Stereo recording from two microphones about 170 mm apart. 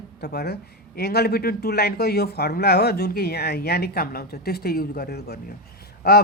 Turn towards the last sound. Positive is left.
turn(degrees=70)  # may be behind; listen again after turning